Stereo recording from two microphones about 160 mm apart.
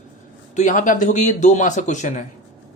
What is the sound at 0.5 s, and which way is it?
Speech, 50° left (ahead or behind).